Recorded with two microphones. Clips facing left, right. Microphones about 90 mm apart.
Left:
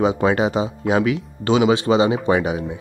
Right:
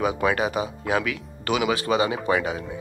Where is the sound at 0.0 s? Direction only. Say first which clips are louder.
Left 5 dB; 25° left (ahead or behind).